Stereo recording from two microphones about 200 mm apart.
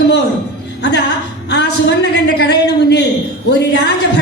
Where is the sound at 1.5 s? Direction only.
60° left (ahead or behind).